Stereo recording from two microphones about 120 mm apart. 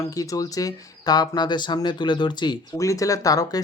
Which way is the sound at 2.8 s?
25° left (ahead or behind).